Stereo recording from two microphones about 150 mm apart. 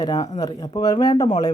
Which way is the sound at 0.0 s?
25° left (ahead or behind).